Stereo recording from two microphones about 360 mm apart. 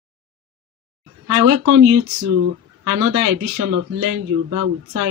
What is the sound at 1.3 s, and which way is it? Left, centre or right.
Speech, right.